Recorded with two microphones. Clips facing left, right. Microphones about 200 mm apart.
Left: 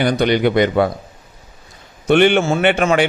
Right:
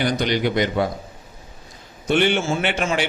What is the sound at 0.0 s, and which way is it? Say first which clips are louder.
Speech: left 6 dB; 60° left (ahead or behind).